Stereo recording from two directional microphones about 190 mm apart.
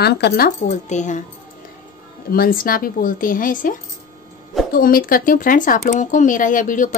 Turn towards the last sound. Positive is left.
turn(degrees=45)  # may be behind; listen again after turning